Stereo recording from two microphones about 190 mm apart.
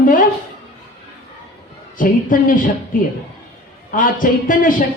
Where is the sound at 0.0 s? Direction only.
45° left (ahead or behind).